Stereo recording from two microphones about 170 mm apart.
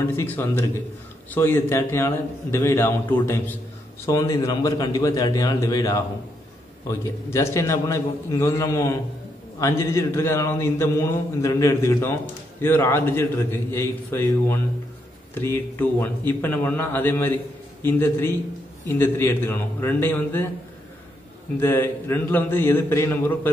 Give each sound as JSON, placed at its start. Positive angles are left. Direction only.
{"t": 0.0, "sound": "a man's voice", "side_deg": 15}
{"t": 21.5, "sound": "a man's voice", "side_deg": 15}